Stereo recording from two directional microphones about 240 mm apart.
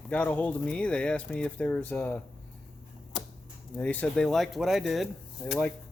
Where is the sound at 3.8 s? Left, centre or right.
Centre.